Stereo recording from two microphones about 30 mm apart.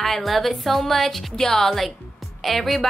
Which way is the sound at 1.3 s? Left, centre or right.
Centre.